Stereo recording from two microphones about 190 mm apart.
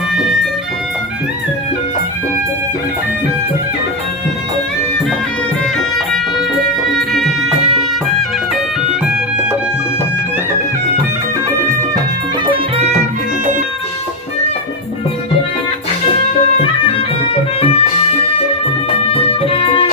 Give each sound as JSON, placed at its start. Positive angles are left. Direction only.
{"t": 7.1, "sound": "music", "side_deg": 0}
{"t": 17.6, "sound": "music", "side_deg": 30}
{"t": 19.1, "sound": "music", "side_deg": 30}